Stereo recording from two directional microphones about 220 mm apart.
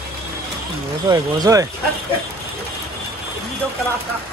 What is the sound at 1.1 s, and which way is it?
Speech, 15° right (ahead or behind).